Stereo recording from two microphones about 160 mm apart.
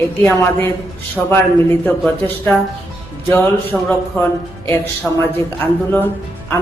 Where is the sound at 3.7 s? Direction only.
Centre (ahead or behind).